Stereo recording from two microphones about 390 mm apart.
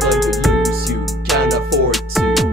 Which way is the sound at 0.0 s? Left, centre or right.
Centre.